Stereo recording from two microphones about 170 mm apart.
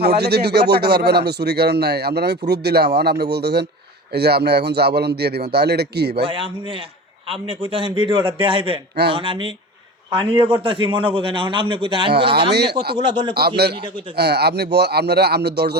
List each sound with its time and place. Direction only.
0.0 s speech: 70° right (ahead or behind)
6.2 s a man's voice: 30° right (ahead or behind)
12.3 s speech: 75° right (ahead or behind)
13.1 s a man's voice: 25° right (ahead or behind)
14.2 s speech: 75° right (ahead or behind)